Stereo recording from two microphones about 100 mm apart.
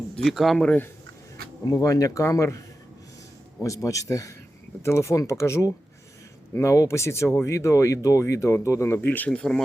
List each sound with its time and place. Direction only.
0.2 s speech: centre (ahead or behind)
0.6 s speech: 15° left (ahead or behind)
1.6 s speech: 35° left (ahead or behind)
9.1 s speech: 15° left (ahead or behind)